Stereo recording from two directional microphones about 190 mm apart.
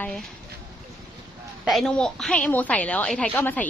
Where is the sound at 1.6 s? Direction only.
Centre (ahead or behind).